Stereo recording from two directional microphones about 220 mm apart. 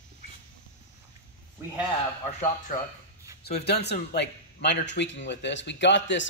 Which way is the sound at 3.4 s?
45° left (ahead or behind).